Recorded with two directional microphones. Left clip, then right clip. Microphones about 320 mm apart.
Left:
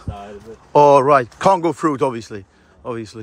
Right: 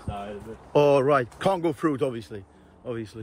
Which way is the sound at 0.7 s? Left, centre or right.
Centre.